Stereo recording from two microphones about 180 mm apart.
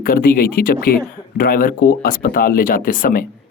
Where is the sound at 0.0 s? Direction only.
55° left (ahead or behind).